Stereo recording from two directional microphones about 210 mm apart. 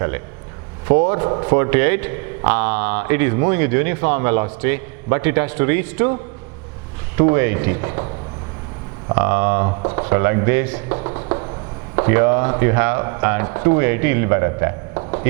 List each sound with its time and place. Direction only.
1.0 s speech: 15° right (ahead or behind)
7.2 s speech: 15° right (ahead or behind)
9.1 s speech: 15° right (ahead or behind)
9.6 s speech: 25° right (ahead or behind)
11.9 s speech: 15° right (ahead or behind)